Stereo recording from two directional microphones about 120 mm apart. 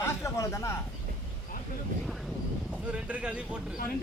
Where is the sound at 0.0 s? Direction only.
25° left (ahead or behind).